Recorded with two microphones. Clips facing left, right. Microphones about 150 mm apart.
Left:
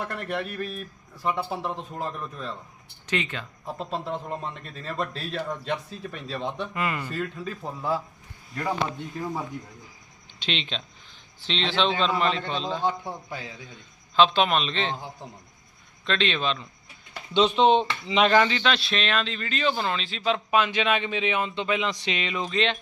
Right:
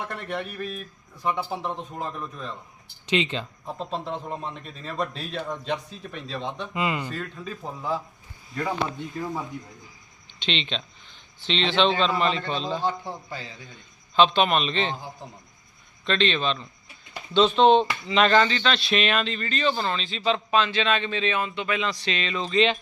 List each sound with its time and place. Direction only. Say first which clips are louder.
0.1 s speech: left 1 dB; centre (ahead or behind)
3.1 s speech: right 4 dB; 20° right (ahead or behind)
3.8 s speech: even; 5° left (ahead or behind)
6.7 s speech: right 5 dB; 20° right (ahead or behind)
7.1 s speech: left 2 dB; 5° left (ahead or behind)
10.4 s speech: right 2 dB; 5° left (ahead or behind)
12.8 s speech: even; 15° left (ahead or behind)
14.2 s speech: right 1 dB; centre (ahead or behind)
16.0 s speech: right 2 dB; 5° left (ahead or behind)
22.5 s speech: right 5 dB; 5° right (ahead or behind)